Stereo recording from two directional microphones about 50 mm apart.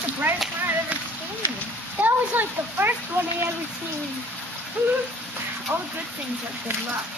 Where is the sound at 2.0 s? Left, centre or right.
Right.